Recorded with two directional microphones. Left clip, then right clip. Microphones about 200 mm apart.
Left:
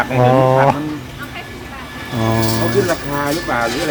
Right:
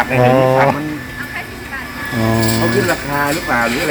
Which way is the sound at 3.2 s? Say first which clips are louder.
Right 1 dB; 35° right (ahead or behind).